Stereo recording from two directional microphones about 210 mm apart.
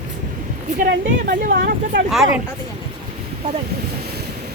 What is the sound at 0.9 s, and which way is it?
Speech, 45° right (ahead or behind).